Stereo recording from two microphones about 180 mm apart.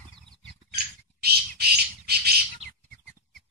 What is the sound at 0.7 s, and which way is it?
Squawk, 60° right (ahead or behind).